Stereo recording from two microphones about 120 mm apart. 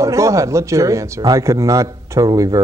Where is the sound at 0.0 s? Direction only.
25° right (ahead or behind).